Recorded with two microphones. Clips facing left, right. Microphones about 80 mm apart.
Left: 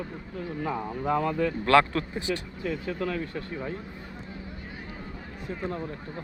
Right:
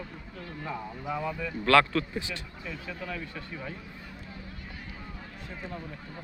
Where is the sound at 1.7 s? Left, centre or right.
Left.